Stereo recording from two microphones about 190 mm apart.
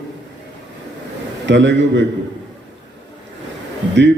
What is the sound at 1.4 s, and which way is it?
Speech, 70° right (ahead or behind).